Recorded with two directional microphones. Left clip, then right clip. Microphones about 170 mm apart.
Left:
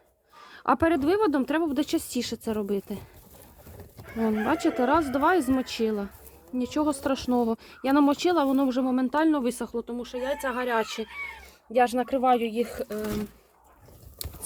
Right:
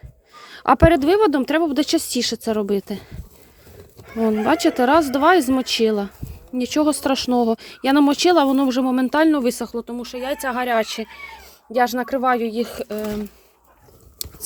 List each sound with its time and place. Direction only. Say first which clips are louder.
0.3 s speech: right 8 dB; 30° right (ahead or behind)
4.3 s speech: right 8 dB; 30° right (ahead or behind)
14.2 s a sound: right 7 dB; 25° right (ahead or behind)